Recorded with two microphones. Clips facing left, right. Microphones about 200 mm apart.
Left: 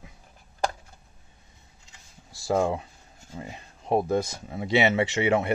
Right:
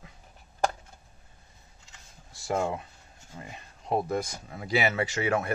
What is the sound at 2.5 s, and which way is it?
Speech, 30° left (ahead or behind).